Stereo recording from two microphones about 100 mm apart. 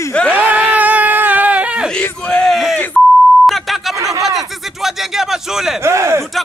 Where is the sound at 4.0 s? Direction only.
35° right (ahead or behind).